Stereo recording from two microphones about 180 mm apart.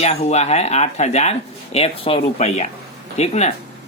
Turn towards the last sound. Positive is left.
turn(degrees=40)  # may be behind; listen again after turning